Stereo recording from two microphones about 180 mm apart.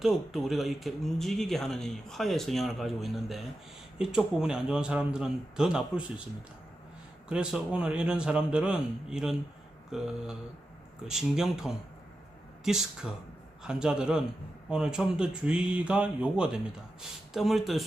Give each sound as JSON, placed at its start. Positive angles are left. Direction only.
{"t": 0.0, "sound": "speech", "side_deg": 0}
{"t": 7.3, "sound": "speech", "side_deg": -5}
{"t": 11.1, "sound": "speech", "side_deg": 0}